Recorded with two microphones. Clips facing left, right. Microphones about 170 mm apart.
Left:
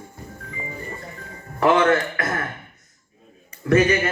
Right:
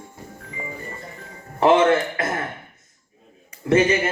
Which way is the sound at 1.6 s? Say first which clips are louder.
Right 2 dB; 25° right (ahead or behind).